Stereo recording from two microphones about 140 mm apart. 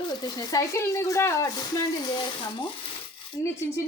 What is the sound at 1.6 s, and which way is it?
Frying, 30° left (ahead or behind).